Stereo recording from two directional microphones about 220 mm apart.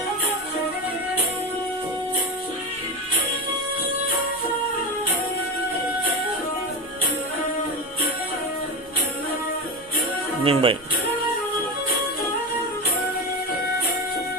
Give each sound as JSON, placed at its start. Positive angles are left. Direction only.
{"t": 10.4, "sound": "speech", "side_deg": -25}